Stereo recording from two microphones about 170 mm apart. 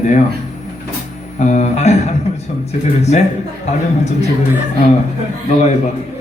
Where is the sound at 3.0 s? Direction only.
40° left (ahead or behind).